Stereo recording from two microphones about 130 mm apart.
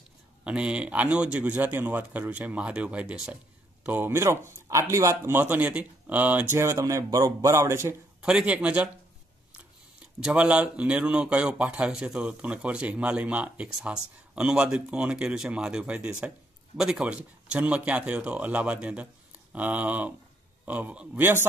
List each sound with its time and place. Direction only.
0.4 s speech: 10° right (ahead or behind)
8.2 s speech: 5° right (ahead or behind)
10.2 s speech: 10° right (ahead or behind)